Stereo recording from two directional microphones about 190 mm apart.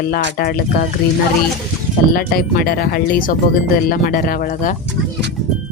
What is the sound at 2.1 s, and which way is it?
Speech, 50° left (ahead or behind).